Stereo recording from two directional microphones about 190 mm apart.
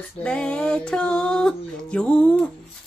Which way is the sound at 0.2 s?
5° left (ahead or behind).